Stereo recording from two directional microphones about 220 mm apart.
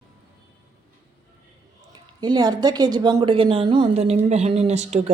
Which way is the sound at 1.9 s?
20° right (ahead or behind).